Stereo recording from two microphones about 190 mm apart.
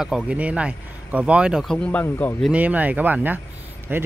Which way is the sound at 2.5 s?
10° right (ahead or behind).